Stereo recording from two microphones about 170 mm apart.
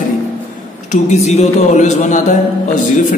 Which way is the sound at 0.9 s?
40° left (ahead or behind).